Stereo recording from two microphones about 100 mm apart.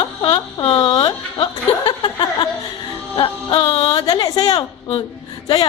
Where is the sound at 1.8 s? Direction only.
45° left (ahead or behind).